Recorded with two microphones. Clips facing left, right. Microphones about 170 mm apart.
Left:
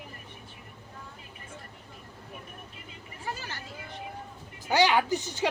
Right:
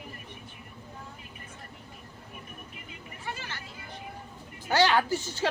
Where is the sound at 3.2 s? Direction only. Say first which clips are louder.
Left 2 dB; 40° left (ahead or behind).